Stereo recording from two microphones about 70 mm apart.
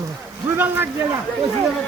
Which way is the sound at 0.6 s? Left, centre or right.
Right.